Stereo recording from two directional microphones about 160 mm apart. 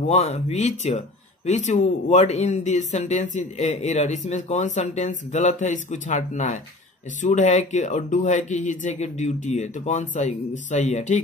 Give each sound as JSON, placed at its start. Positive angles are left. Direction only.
{"t": 0.1, "sound": "speech", "side_deg": 45}